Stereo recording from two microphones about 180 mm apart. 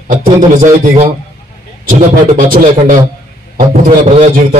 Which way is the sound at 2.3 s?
45° right (ahead or behind).